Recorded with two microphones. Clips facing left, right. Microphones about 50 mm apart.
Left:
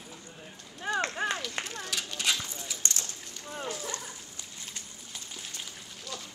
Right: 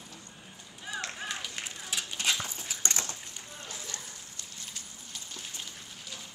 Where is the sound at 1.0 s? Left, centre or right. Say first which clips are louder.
Left 7 dB; left.